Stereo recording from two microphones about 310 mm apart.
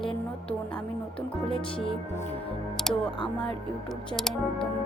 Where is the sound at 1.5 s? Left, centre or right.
Centre.